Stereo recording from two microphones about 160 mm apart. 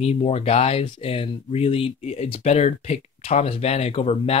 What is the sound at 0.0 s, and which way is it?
Speech, 40° left (ahead or behind).